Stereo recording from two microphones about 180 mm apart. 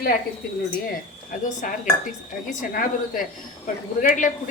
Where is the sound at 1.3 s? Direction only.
45° left (ahead or behind).